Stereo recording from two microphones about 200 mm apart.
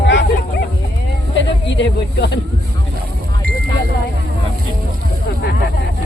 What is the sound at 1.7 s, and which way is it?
Speech, 60° left (ahead or behind).